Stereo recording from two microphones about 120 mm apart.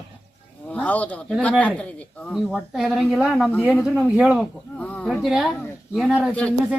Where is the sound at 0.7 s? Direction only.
10° left (ahead or behind).